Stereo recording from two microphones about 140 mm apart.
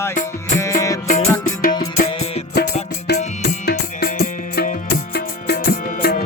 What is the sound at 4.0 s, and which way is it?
Music, 90° left.